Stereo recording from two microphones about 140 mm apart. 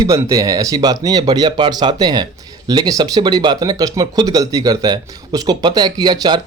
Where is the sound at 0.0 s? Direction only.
20° right (ahead or behind).